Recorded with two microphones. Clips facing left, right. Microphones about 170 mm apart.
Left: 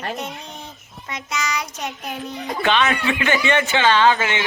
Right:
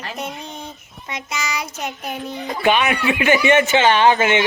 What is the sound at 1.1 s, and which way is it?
A child's voice, centre (ahead or behind).